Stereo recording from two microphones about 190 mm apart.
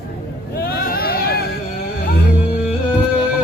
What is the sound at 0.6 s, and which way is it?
Vehicle, 50° left (ahead or behind).